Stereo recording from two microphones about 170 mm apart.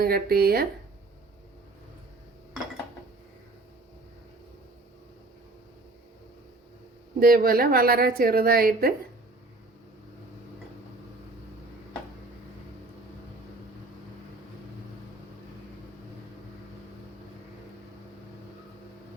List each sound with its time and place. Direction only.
0.0 s a woman's voice: 60° right (ahead or behind)
7.2 s a woman's voice: 60° right (ahead or behind)